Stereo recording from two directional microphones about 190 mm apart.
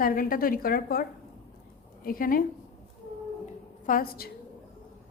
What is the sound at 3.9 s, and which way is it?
Speech, 50° left (ahead or behind).